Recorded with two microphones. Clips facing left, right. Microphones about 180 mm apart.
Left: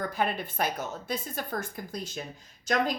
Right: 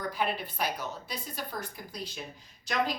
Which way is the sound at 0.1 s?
50° left (ahead or behind).